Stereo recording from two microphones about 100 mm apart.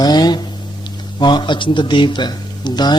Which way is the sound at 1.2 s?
50° left (ahead or behind).